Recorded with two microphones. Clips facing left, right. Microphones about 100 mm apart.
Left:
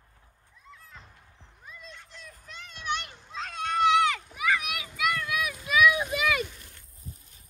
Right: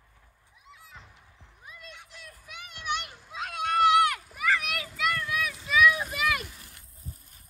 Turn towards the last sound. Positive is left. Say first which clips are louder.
# left 2 dB
turn(degrees=0)  # may be behind; listen again after turning